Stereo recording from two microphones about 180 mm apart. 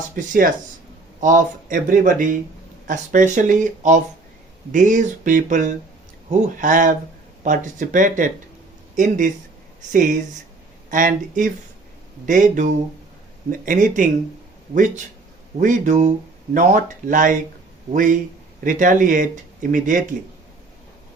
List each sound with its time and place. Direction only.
0.2 s speech: 50° right (ahead or behind)